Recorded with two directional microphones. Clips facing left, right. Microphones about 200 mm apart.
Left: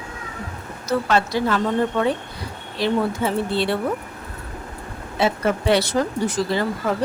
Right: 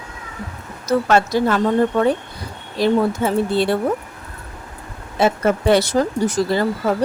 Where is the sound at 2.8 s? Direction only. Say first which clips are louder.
Right 4 dB; 45° right (ahead or behind).